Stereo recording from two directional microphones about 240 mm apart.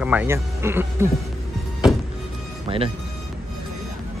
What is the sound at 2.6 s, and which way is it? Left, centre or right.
Speech, right.